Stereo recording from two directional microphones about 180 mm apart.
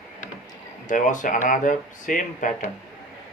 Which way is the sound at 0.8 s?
45° left (ahead or behind).